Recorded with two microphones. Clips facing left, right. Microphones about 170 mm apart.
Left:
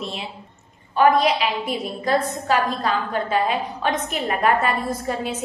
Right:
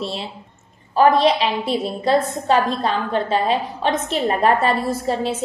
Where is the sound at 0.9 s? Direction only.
30° right (ahead or behind).